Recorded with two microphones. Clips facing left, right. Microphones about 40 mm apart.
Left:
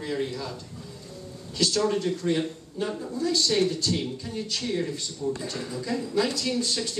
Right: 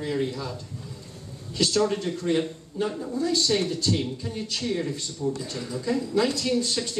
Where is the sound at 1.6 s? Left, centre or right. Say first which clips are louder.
Right 1 dB; centre.